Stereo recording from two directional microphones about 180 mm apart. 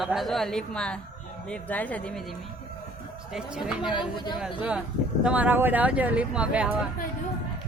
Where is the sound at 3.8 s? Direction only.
25° left (ahead or behind).